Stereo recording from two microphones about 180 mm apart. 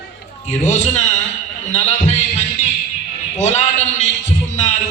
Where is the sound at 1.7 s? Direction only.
40° left (ahead or behind).